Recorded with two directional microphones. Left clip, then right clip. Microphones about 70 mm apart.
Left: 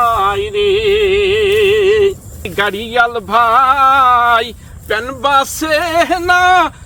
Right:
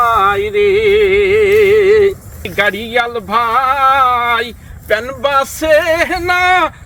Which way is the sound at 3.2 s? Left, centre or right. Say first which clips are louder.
Left 2 dB; left.